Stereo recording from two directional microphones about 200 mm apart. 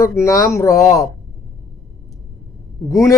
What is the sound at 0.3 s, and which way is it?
Speech, 15° left (ahead or behind).